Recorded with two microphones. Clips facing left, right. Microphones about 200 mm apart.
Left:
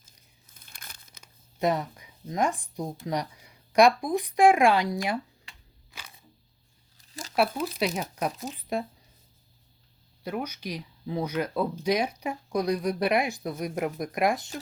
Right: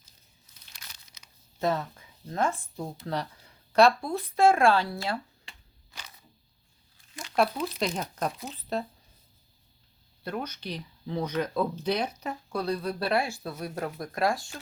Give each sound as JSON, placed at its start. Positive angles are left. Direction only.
{"t": 0.0, "sound": "crumpling", "side_deg": 50}
{"t": 1.5, "sound": "speech", "side_deg": 15}
{"t": 6.9, "sound": "a sound", "side_deg": 40}
{"t": 7.3, "sound": "speech", "side_deg": 10}
{"t": 10.2, "sound": "speech", "side_deg": 10}